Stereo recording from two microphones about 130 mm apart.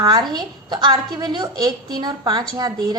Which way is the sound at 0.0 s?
35° right (ahead or behind).